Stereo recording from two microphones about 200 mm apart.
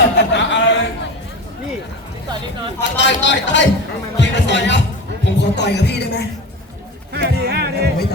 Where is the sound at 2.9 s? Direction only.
60° left (ahead or behind).